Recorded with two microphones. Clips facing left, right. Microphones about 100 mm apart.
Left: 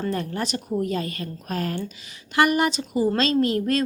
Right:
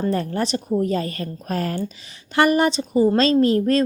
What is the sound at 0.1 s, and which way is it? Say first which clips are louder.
A woman's voice: right 4 dB; 35° right (ahead or behind).